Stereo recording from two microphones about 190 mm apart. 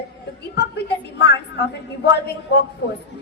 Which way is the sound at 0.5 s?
60° left (ahead or behind).